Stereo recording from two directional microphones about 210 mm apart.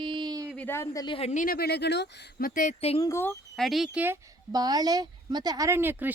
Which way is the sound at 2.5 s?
35° left (ahead or behind).